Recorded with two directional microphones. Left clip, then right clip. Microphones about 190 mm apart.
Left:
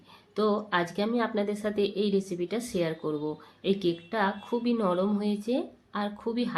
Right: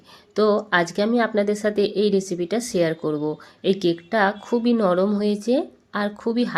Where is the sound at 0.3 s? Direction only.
35° right (ahead or behind).